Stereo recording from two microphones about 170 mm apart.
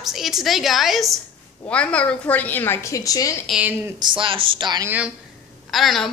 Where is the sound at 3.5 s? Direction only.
10° right (ahead or behind).